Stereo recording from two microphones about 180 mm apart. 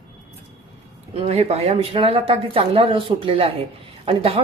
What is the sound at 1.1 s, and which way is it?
Speech, 35° right (ahead or behind).